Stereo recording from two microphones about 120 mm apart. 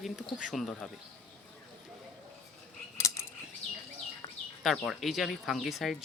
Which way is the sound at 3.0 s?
25° left (ahead or behind).